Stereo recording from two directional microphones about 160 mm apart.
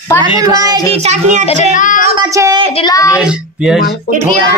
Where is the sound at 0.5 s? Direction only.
20° right (ahead or behind).